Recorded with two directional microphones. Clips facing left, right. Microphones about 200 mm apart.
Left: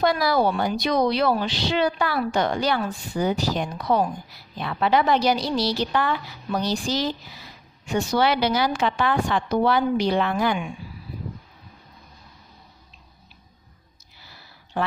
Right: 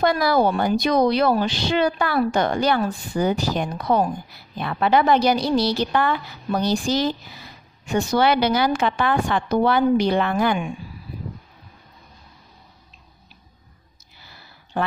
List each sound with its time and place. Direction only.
0.0 s a woman's voice: 50° right (ahead or behind)